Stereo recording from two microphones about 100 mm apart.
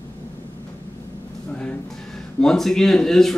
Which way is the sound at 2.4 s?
5° left (ahead or behind).